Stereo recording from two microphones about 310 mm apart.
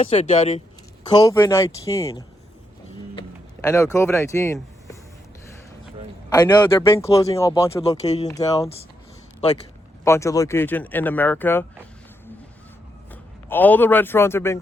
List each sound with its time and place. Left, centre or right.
0.0 s speech: left
3.2 s a sound: centre
3.9 s speech: centre
6.3 s speech: centre
10.0 s speech: centre
13.1 s a man's voice: centre